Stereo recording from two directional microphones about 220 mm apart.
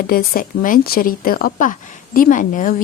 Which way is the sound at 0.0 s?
45° left (ahead or behind).